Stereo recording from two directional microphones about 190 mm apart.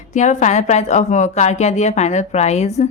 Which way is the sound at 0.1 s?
40° left (ahead or behind).